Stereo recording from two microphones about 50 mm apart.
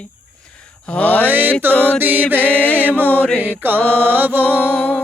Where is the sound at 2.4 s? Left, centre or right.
Left.